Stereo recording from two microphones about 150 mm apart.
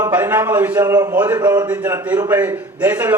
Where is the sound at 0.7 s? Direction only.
25° right (ahead or behind).